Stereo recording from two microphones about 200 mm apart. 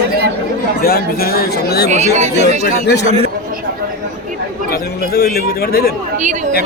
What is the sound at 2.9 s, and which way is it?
Speech, 55° left (ahead or behind).